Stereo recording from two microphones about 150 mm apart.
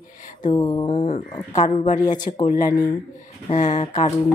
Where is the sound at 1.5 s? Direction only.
50° left (ahead or behind).